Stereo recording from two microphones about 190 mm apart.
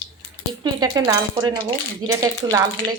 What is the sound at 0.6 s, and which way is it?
Speech, 20° right (ahead or behind).